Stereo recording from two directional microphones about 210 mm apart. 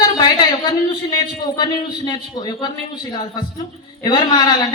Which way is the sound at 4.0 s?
20° left (ahead or behind).